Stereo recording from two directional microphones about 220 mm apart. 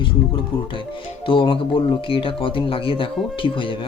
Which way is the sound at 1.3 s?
20° left (ahead or behind).